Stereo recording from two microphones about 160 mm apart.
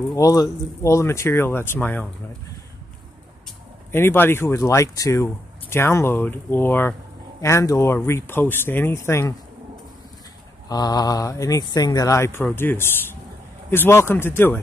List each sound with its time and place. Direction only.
0.1 s speech: 20° left (ahead or behind)
3.9 s speech: 15° left (ahead or behind)
10.7 s speech: 25° left (ahead or behind)